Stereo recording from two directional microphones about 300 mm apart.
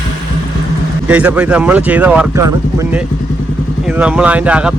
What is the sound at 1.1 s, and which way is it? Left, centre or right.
Speech, centre.